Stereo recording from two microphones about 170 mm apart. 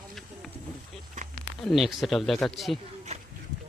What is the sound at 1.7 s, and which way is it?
Speech, centre (ahead or behind).